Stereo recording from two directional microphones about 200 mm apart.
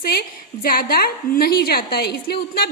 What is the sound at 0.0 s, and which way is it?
A woman's voice, 50° left (ahead or behind).